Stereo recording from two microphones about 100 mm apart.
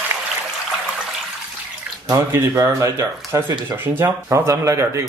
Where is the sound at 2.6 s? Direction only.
30° right (ahead or behind).